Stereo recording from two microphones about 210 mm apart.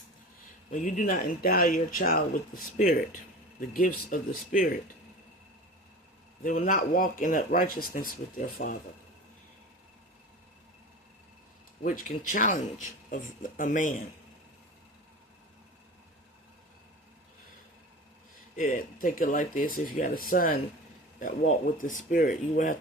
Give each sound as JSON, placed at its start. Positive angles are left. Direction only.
{"t": 0.7, "sound": "speech", "side_deg": 40}
{"t": 6.4, "sound": "speech", "side_deg": 40}
{"t": 11.8, "sound": "speech", "side_deg": 40}
{"t": 18.5, "sound": "speech", "side_deg": 40}
{"t": 21.8, "sound": "speech", "side_deg": 40}